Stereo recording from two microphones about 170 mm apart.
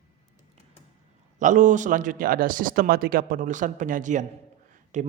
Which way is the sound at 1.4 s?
50° right (ahead or behind).